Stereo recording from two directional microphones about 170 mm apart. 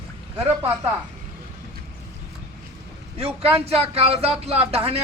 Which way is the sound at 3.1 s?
35° right (ahead or behind).